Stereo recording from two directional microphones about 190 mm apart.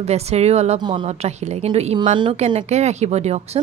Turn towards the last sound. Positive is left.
turn(degrees=-35)  # may be behind; listen again after turning